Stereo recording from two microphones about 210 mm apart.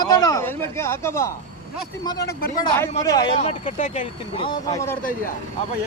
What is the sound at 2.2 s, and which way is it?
Speech, 50° left (ahead or behind).